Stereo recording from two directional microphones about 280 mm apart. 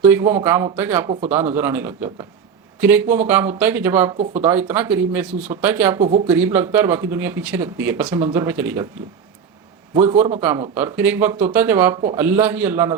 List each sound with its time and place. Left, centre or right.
0.0 s speech: centre
6.0 s speech: right
6.2 s speech: centre
10.4 s speech: centre